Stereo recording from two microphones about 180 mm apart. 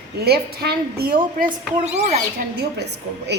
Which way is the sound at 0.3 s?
60° right (ahead or behind).